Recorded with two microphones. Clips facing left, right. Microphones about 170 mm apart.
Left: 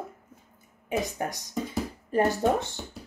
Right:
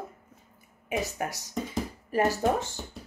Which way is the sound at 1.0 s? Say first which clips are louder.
Left 1 dB; 5° right (ahead or behind).